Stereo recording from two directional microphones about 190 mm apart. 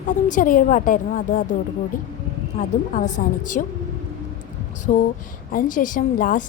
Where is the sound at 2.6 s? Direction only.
40° left (ahead or behind).